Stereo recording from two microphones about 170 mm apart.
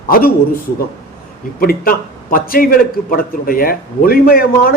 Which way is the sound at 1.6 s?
60° left (ahead or behind).